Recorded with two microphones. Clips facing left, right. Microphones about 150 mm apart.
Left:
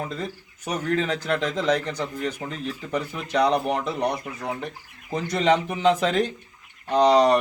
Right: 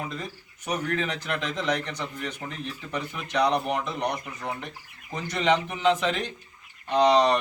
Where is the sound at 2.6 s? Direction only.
35° left (ahead or behind).